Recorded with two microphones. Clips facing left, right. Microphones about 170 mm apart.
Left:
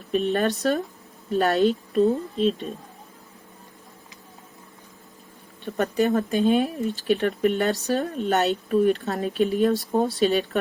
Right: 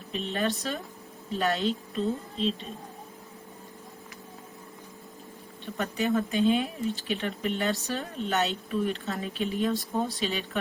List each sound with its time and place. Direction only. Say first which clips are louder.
0.1 s a woman's voice: left 7 dB; 55° left (ahead or behind)
5.7 s speech: left 6 dB; 40° left (ahead or behind)